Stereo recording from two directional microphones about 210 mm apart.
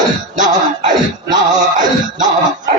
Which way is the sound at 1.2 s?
20° right (ahead or behind).